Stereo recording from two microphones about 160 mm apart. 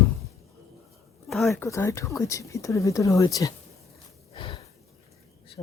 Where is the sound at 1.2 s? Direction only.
Centre (ahead or behind).